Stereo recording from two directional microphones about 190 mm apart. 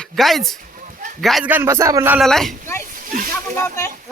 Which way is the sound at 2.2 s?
Centre (ahead or behind).